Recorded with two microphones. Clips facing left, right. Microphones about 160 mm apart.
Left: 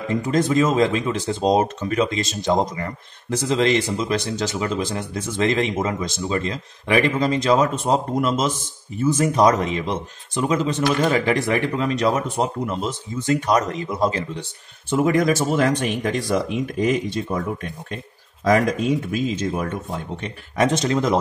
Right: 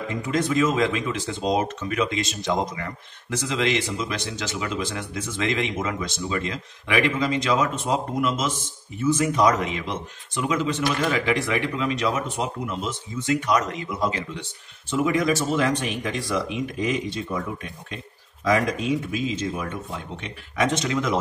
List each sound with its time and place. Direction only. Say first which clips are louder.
0.1 s speech: left 5 dB; 35° left (ahead or behind)
20.2 s speech: left 4 dB; 40° left (ahead or behind)